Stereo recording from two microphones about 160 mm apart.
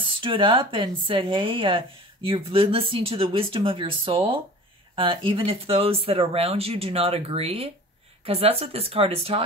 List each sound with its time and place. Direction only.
0.0 s speech: 35° right (ahead or behind)